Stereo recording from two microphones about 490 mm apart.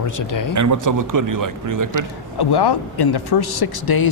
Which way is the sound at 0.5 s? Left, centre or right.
Right.